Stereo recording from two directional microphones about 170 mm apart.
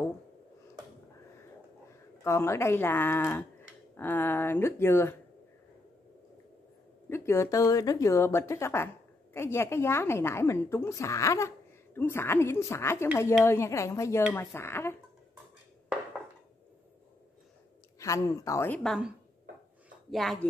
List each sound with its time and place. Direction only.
1.9 s speech: 15° left (ahead or behind)
7.1 s speech: 15° left (ahead or behind)
17.9 s speech: 20° left (ahead or behind)
18.8 s speech: centre (ahead or behind)